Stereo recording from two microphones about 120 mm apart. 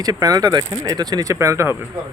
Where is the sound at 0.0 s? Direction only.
30° right (ahead or behind).